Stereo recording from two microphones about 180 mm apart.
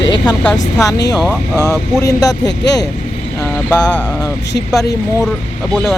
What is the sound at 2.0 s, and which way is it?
Speech, 20° left (ahead or behind).